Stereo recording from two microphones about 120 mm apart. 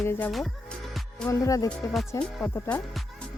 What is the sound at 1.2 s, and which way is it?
Speech, 25° left (ahead or behind).